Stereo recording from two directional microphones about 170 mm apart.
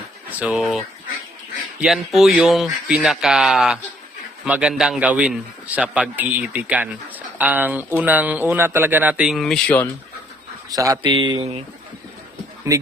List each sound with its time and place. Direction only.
0.3 s speech: 10° right (ahead or behind); by 9.9 s 10° left (ahead or behind)
10.7 s speech: 20° right (ahead or behind)
12.7 s speech: 20° right (ahead or behind)